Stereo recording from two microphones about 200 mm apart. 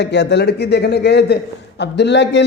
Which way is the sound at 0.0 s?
60° left (ahead or behind).